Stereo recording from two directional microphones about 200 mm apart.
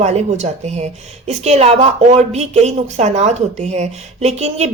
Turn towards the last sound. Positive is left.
turn(degrees=-30)  # may be behind; listen again after turning